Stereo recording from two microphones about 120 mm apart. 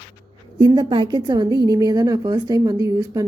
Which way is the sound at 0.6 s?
40° right (ahead or behind).